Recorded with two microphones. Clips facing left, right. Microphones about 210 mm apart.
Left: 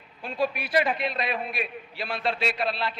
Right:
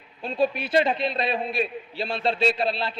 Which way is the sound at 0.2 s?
25° right (ahead or behind).